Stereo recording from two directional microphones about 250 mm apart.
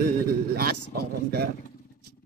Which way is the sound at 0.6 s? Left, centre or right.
Right.